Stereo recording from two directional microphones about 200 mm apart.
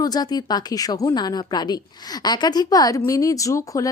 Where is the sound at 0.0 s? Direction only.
20° left (ahead or behind).